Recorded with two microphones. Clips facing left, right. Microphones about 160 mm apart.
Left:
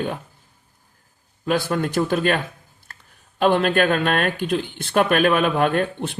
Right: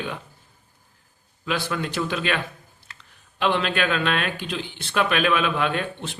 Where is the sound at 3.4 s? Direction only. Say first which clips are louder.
Left 6 dB; 45° left (ahead or behind).